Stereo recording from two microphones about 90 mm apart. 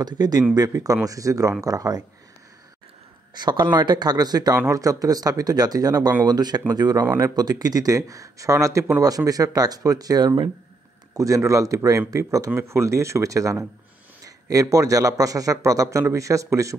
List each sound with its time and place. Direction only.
0.0 s a man's voice: 50° right (ahead or behind)
3.3 s speech: 55° right (ahead or behind)
4.6 s a man's voice: 35° right (ahead or behind)
11.1 s a man's voice: 35° right (ahead or behind)